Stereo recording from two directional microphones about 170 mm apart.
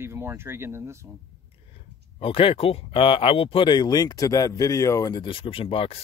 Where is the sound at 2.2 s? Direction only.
30° left (ahead or behind).